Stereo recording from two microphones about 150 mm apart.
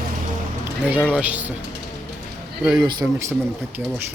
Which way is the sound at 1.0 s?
10° left (ahead or behind).